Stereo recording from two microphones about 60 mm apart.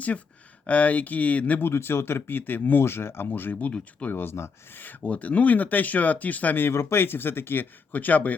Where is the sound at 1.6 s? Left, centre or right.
Left.